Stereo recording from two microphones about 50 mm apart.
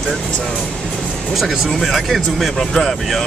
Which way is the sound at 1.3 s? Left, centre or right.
Centre.